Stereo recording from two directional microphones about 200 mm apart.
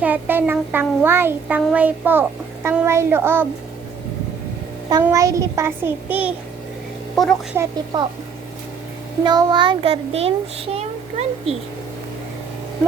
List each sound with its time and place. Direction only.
0.0 s child singing: 10° right (ahead or behind)
5.0 s child singing: 15° right (ahead or behind)
7.2 s speech: centre (ahead or behind)
7.5 s child singing: 15° right (ahead or behind)
9.2 s a child's voice: 20° right (ahead or behind)